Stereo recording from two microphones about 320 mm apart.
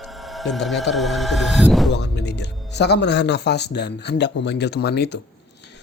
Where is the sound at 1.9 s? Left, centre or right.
Left.